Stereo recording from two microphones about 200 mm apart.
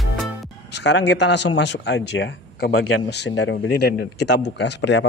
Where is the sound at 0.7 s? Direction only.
60° left (ahead or behind).